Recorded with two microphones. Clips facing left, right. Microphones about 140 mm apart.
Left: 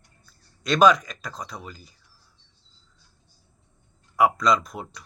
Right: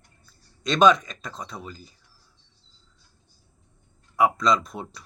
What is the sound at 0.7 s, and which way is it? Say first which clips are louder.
Speech: even; centre (ahead or behind).